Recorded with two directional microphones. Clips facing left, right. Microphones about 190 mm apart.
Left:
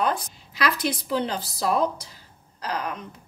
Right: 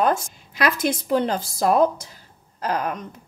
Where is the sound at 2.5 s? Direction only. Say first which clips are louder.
Right 5 dB; 50° right (ahead or behind).